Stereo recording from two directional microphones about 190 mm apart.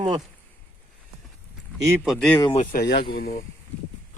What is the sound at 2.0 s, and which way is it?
Speech, 5° left (ahead or behind).